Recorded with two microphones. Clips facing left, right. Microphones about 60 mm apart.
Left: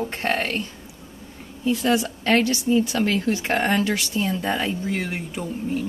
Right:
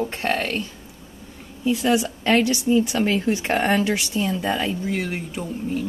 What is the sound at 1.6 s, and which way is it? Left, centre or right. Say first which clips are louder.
A woman's voice: right 1 dB; centre.